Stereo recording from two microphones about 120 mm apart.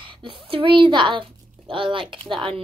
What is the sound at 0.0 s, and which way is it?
A woman's voice, 45° right (ahead or behind).